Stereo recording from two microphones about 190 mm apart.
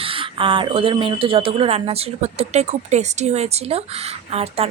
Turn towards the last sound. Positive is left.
turn(degrees=-35)  # may be behind; listen again after turning